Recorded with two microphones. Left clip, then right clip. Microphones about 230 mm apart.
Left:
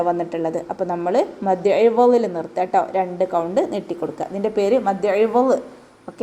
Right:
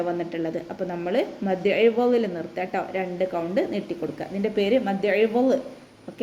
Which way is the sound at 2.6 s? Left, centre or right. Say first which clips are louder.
Left 9 dB; left.